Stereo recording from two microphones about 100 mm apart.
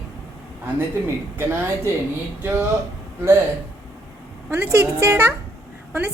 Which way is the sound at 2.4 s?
25° right (ahead or behind).